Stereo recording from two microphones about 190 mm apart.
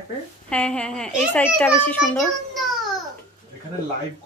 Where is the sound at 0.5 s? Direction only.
5° left (ahead or behind).